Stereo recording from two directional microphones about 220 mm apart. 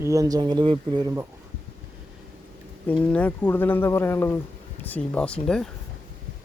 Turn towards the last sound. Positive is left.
turn(degrees=5)  # may be behind; listen again after turning